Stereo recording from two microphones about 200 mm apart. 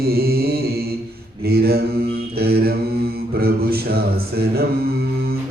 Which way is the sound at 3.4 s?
50° right (ahead or behind).